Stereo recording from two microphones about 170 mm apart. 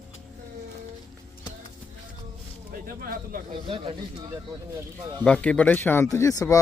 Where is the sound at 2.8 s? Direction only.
60° right (ahead or behind).